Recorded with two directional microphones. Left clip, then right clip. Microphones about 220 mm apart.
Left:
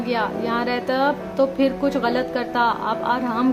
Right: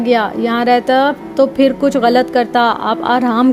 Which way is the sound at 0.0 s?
35° right (ahead or behind).